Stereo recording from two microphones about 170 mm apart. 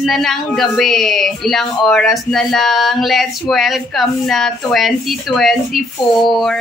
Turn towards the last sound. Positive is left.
turn(degrees=0)  # may be behind; listen again after turning